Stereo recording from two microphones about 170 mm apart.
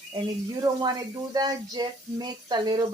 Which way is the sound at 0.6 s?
25° right (ahead or behind).